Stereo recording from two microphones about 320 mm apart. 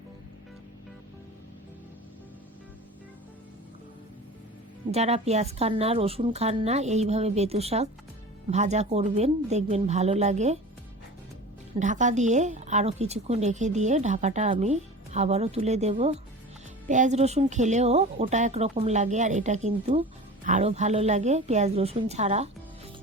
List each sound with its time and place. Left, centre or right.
4.9 s speech: centre
11.8 s speech: right